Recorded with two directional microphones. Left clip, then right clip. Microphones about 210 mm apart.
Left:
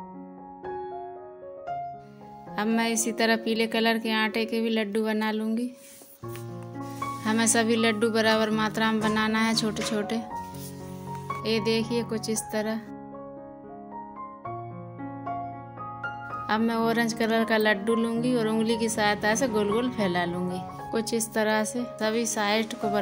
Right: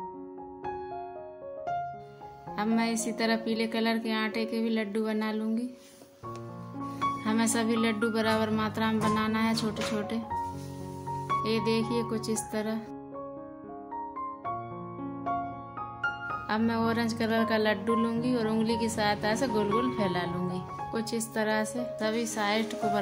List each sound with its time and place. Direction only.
2.5 s a woman's voice: 30° left (ahead or behind)
7.2 s speech: 30° left (ahead or behind)
11.4 s speech: 30° left (ahead or behind)
16.4 s speech: 25° left (ahead or behind)